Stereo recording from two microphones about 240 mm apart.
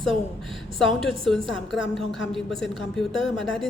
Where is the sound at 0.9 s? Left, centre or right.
Centre.